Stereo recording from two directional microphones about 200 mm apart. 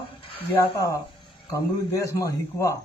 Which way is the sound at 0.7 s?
15° left (ahead or behind).